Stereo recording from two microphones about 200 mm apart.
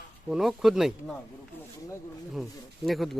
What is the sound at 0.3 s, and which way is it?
Speech, centre (ahead or behind).